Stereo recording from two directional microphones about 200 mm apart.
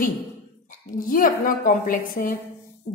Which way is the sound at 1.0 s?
45° left (ahead or behind).